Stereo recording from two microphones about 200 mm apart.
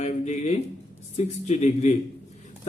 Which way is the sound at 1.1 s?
35° left (ahead or behind).